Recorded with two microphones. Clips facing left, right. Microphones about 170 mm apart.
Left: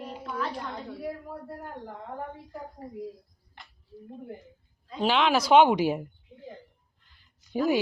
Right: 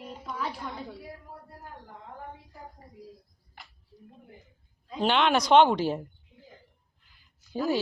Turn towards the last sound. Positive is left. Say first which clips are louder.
# left 3 dB
turn(degrees=15)  # may be behind; listen again after turning